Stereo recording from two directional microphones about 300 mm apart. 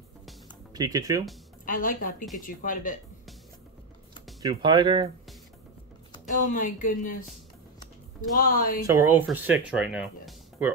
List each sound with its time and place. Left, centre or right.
0.7 s speech: centre
1.7 s a woman's voice: left
4.4 s speech: centre
6.1 s speech: left
8.4 s a woman's voice: left
8.8 s speech: centre